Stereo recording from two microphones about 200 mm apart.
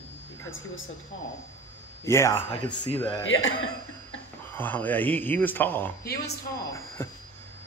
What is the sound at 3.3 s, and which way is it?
Speech, 75° left (ahead or behind).